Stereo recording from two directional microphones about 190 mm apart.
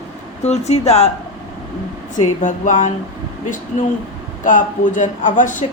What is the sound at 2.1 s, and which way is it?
Speech, 40° left (ahead or behind).